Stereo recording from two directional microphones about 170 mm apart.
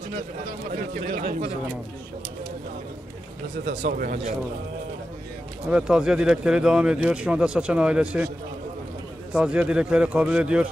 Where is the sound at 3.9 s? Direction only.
55° right (ahead or behind).